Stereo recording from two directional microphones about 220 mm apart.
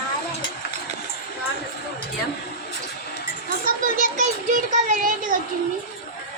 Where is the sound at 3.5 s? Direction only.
40° right (ahead or behind).